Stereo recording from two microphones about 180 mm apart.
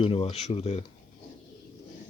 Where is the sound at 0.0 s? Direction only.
30° left (ahead or behind).